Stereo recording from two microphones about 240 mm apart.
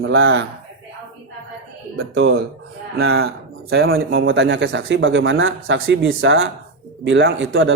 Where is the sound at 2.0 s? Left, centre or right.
Right.